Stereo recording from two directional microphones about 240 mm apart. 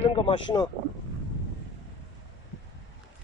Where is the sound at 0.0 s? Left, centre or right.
Left.